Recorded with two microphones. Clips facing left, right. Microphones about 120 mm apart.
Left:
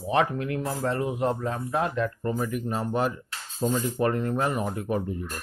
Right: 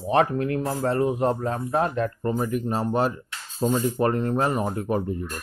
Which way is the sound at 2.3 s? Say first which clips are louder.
Right 3 dB; 30° right (ahead or behind).